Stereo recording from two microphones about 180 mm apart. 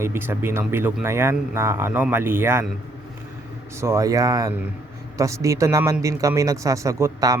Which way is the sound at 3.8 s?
15° right (ahead or behind).